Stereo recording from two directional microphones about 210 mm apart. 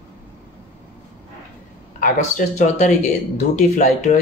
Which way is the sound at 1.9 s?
35° left (ahead or behind).